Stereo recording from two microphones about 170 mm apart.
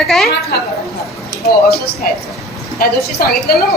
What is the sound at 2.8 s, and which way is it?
Speech, 65° left (ahead or behind).